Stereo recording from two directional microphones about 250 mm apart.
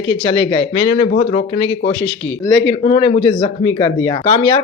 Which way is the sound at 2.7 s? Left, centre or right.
Centre.